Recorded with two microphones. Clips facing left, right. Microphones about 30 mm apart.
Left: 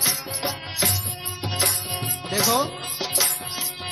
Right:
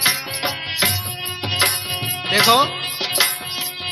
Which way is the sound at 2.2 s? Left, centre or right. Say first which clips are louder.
Right 8 dB; right.